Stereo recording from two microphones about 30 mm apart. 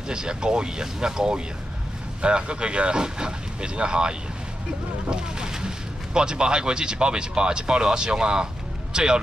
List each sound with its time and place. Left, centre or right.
0.1 s speech: right
5.1 s a sound: right
6.1 s speech: right